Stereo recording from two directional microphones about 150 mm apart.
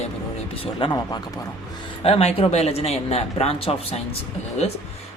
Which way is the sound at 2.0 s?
40° left (ahead or behind).